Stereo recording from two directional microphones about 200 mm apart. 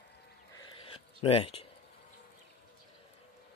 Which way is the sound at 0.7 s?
25° left (ahead or behind).